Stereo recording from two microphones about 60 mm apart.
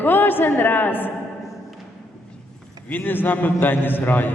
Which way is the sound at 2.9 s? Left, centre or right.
Left.